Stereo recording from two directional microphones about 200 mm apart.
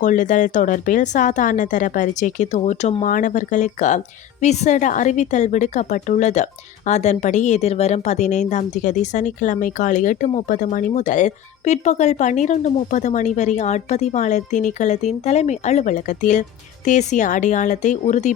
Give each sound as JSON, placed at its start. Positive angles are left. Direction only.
{"t": 0.0, "sound": "a woman's voice", "side_deg": 40}